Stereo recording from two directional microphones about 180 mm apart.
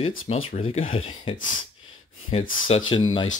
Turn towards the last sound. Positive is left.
turn(degrees=30)  # may be behind; listen again after turning